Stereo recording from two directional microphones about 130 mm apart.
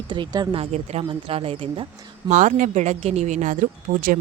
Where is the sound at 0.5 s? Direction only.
55° right (ahead or behind).